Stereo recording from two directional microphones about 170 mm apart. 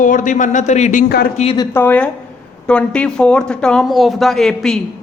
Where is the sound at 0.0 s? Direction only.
50° left (ahead or behind).